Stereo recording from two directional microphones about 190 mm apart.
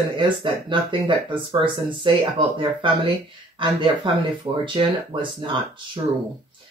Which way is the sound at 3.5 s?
25° right (ahead or behind).